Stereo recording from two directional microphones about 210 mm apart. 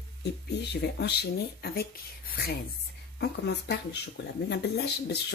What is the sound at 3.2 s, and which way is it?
Speech, 55° left (ahead or behind).